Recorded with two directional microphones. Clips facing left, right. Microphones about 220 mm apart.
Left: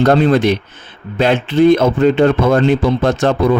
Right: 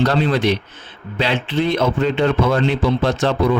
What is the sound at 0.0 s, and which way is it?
A man's voice, 50° left (ahead or behind).